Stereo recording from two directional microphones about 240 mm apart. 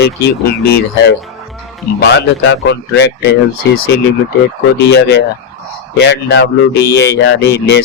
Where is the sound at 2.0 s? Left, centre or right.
Left.